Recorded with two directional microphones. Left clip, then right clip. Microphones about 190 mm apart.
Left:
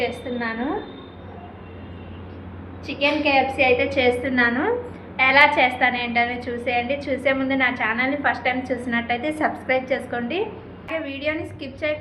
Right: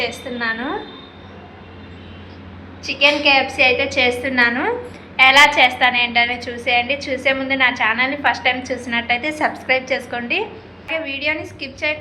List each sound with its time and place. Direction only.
0.0 s a woman's voice: 5° left (ahead or behind)
2.8 s a woman's voice: centre (ahead or behind)